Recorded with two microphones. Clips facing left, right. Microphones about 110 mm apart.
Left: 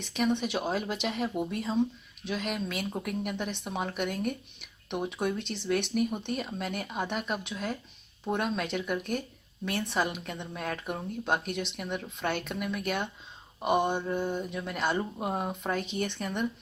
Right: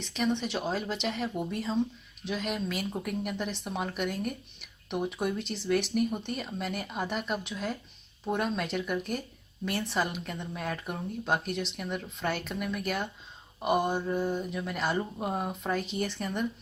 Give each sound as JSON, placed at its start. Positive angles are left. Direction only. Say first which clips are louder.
{"t": 0.0, "sound": "speech", "louder": "left 1 dB", "side_deg": 5}